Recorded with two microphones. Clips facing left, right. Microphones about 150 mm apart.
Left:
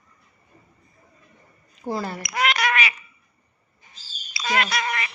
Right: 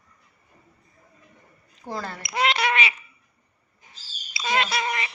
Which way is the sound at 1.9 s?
10° left (ahead or behind).